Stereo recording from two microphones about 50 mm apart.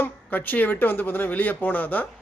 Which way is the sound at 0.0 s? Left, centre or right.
Left.